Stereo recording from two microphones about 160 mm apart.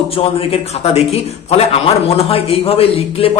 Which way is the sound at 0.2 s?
40° left (ahead or behind).